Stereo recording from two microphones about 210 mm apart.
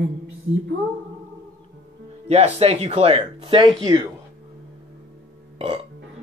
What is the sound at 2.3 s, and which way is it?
A man's voice, 30° right (ahead or behind).